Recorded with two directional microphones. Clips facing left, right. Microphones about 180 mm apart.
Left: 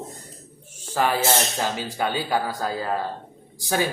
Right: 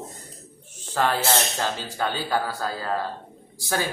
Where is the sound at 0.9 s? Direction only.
10° left (ahead or behind).